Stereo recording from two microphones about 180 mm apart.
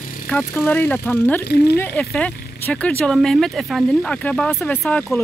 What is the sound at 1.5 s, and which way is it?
Speech, 65° left (ahead or behind).